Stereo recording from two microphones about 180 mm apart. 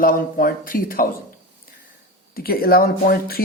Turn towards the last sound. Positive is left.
turn(degrees=55)  # may be behind; listen again after turning